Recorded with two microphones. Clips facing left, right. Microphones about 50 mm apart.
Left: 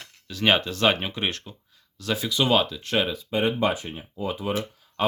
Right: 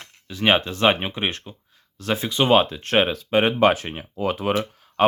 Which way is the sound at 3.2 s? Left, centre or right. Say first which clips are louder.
Right 6 dB; right.